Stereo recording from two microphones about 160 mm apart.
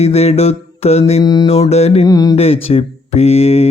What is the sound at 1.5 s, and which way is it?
Speech, 40° left (ahead or behind).